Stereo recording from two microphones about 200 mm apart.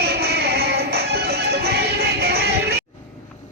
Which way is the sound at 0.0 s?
55° right (ahead or behind).